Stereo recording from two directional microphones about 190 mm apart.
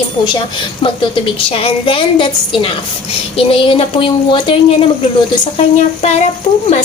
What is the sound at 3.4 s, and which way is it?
Speech, 30° left (ahead or behind).